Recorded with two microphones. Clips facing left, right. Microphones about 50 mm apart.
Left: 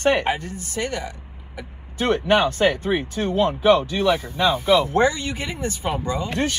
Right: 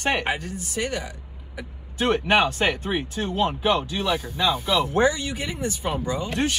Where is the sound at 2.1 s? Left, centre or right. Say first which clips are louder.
Left 2 dB; right.